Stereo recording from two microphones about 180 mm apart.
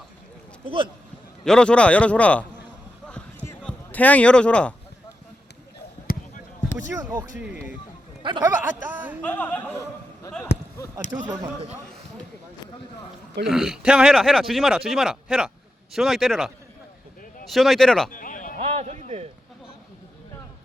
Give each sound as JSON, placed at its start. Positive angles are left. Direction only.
{"t": 0.6, "sound": "speech", "side_deg": -30}
{"t": 1.5, "sound": "a man's voice", "side_deg": 5}
{"t": 3.1, "sound": "basketball bounce", "side_deg": 5}
{"t": 3.6, "sound": "a man's voice", "side_deg": 5}
{"t": 6.1, "sound": "basketball bounce", "side_deg": 55}
{"t": 6.7, "sound": "speech", "side_deg": -15}
{"t": 7.3, "sound": "speech", "side_deg": -5}
{"t": 8.2, "sound": "speech", "side_deg": -25}
{"t": 8.9, "sound": "speech", "side_deg": -10}
{"t": 9.2, "sound": "a man's voice", "side_deg": 10}
{"t": 11.1, "sound": "speech", "side_deg": -15}
{"t": 13.4, "sound": "speech", "side_deg": 0}
{"t": 18.1, "sound": "a sound", "side_deg": 45}
{"t": 18.5, "sound": "speech", "side_deg": -40}